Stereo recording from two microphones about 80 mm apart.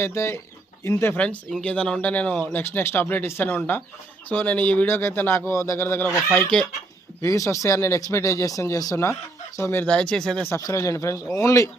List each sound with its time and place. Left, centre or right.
0.0 s speech: left
1.1 s speech: centre
2.6 s speech: left
5.5 s speech: left
7.2 s speech: left
9.6 s speech: left
9.8 s speech: centre
10.7 s speech: left